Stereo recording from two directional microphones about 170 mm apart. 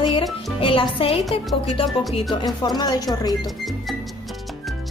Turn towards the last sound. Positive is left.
turn(degrees=25)  # may be behind; listen again after turning